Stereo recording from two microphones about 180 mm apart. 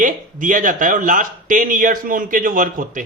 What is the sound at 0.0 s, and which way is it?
Speech, 45° right (ahead or behind).